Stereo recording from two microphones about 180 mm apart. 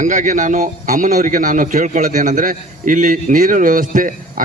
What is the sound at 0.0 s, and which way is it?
A man's voice, 45° right (ahead or behind).